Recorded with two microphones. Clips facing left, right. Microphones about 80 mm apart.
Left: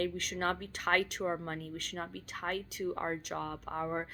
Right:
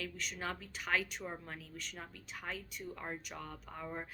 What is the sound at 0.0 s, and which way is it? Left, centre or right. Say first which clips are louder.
Speech: left 8 dB; left.